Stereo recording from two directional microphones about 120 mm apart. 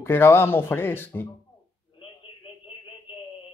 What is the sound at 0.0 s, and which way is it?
Speech, 20° left (ahead or behind).